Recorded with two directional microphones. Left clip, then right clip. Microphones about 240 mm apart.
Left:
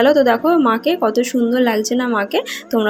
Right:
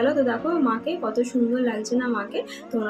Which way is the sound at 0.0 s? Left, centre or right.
Left.